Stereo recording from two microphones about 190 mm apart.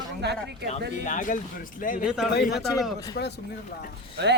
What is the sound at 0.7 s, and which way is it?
Speech, 40° left (ahead or behind).